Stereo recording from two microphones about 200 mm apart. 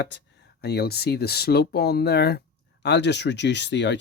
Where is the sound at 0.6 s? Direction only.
55° left (ahead or behind).